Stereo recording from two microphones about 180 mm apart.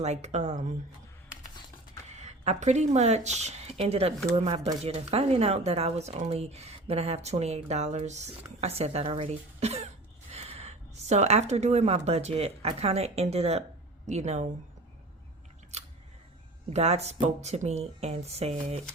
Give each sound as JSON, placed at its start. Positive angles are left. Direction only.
{"t": 0.0, "sound": "speech", "side_deg": -40}
{"t": 2.0, "sound": "speech", "side_deg": -40}
{"t": 15.7, "sound": "scissors", "side_deg": -35}
{"t": 16.6, "sound": "speech", "side_deg": -35}